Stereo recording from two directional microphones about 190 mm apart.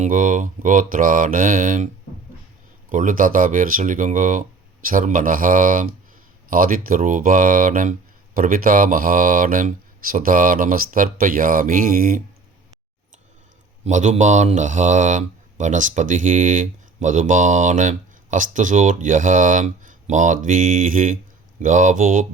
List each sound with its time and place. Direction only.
0.0 s speech: 45° right (ahead or behind)
2.9 s speech: 45° right (ahead or behind)
13.8 s a man's voice: 40° right (ahead or behind)